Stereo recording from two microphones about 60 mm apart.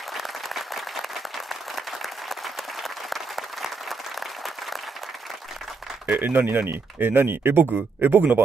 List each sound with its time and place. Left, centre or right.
0.1 s applause: centre
6.0 s speech: right